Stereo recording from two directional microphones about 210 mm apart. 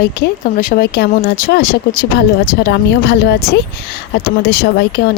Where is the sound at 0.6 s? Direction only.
45° left (ahead or behind).